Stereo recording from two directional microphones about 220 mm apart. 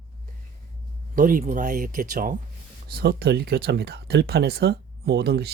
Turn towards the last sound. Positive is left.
turn(degrees=-45)  # may be behind; listen again after turning